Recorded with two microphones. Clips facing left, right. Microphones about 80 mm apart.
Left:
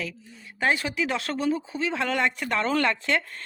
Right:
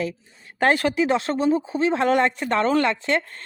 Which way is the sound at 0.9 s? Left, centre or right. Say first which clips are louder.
Right 7 dB; right.